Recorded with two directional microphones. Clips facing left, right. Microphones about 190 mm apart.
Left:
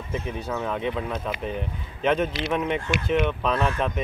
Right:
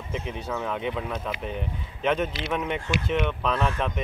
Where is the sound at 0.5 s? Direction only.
Centre (ahead or behind).